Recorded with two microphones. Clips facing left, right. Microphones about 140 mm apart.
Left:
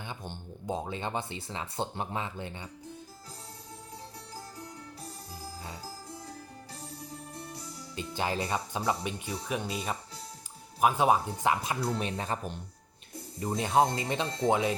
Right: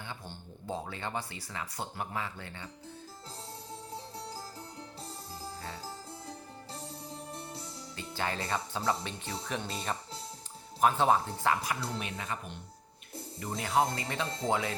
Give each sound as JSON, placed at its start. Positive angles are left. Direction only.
{"t": 0.1, "sound": "speech", "side_deg": 20}
{"t": 7.1, "sound": "music", "side_deg": -30}
{"t": 7.9, "sound": "speech", "side_deg": 20}
{"t": 11.9, "sound": "speech", "side_deg": 35}
{"t": 13.4, "sound": "speech", "side_deg": 25}